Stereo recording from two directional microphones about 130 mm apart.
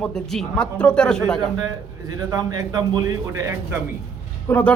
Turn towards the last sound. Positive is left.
turn(degrees=15)  # may be behind; listen again after turning